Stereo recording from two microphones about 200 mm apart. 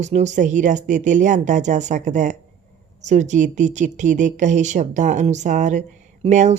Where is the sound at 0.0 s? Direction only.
35° right (ahead or behind).